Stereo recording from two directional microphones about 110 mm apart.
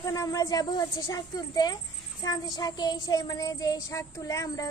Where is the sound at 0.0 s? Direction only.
35° left (ahead or behind).